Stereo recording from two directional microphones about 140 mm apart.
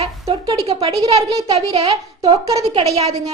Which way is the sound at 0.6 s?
45° right (ahead or behind).